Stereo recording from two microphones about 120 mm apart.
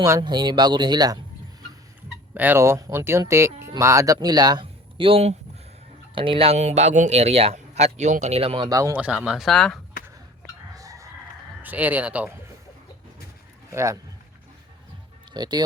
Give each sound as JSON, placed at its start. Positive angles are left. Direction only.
{"t": 0.2, "sound": "speech", "side_deg": -35}
{"t": 2.3, "sound": "speech", "side_deg": -15}
{"t": 4.6, "sound": "speech", "side_deg": -50}
{"t": 6.1, "sound": "speech", "side_deg": -45}
{"t": 8.6, "sound": "speech", "side_deg": -30}
{"t": 9.0, "sound": "speech", "side_deg": -10}
{"t": 10.8, "sound": "chicken", "side_deg": -30}
{"t": 11.6, "sound": "speech", "side_deg": -15}
{"t": 13.7, "sound": "a man's voice", "side_deg": -25}
{"t": 15.3, "sound": "speech", "side_deg": -35}